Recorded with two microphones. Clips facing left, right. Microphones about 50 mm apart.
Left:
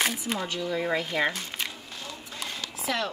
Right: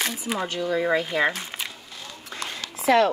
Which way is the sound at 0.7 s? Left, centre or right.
Centre.